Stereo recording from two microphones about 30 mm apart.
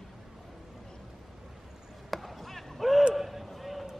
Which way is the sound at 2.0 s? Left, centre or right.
Centre.